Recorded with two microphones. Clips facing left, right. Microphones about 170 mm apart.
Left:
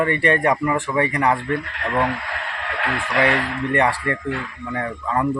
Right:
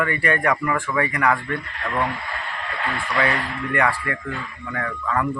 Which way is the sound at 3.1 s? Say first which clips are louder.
Left 4 dB; 30° left (ahead or behind).